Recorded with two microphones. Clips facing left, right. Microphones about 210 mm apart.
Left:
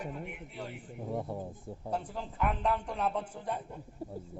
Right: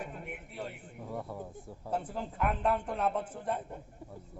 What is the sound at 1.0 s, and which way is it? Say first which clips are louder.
Speech: left 3 dB; 25° left (ahead or behind).